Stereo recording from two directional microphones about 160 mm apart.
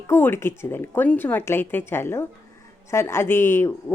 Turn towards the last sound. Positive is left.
turn(degrees=15)  # may be behind; listen again after turning